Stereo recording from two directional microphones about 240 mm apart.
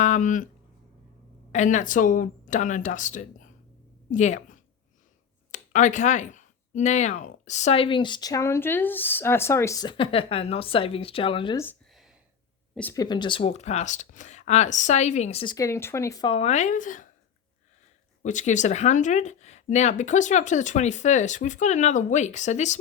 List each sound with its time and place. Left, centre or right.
0.0 s speech: left
1.5 s a woman's voice: left
11.6 s a sound: centre
12.7 s speech: centre; by 17.1 s left
18.2 s speech: left